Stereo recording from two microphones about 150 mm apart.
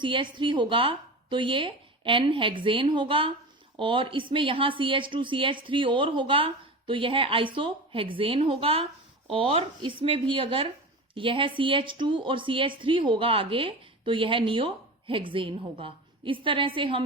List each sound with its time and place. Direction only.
0.0 s a woman's voice: 35° right (ahead or behind)